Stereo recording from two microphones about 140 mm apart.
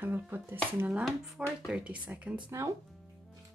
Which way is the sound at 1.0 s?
5° right (ahead or behind).